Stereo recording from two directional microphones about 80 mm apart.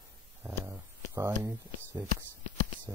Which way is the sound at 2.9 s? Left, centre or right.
Right.